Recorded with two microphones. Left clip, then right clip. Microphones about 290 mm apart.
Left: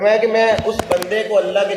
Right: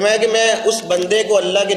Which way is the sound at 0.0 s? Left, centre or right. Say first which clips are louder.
Even; right.